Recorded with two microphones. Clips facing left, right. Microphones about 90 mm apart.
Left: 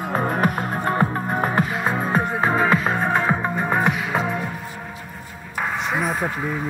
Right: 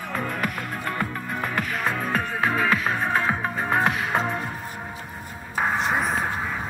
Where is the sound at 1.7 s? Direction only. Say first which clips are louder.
Left 4 dB; 20° left (ahead or behind).